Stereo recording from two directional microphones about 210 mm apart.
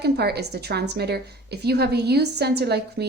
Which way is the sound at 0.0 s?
50° right (ahead or behind).